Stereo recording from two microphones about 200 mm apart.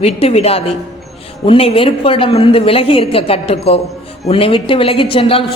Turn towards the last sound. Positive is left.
turn(degrees=30)  # may be behind; listen again after turning